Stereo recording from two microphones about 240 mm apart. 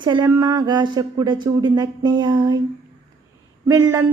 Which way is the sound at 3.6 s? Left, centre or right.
Centre.